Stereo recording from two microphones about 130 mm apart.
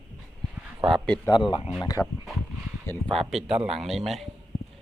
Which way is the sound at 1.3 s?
35° left (ahead or behind).